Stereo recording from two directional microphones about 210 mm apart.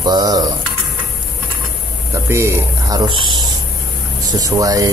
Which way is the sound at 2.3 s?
10° right (ahead or behind).